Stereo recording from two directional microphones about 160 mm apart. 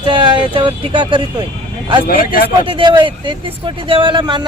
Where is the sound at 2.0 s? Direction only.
65° left (ahead or behind).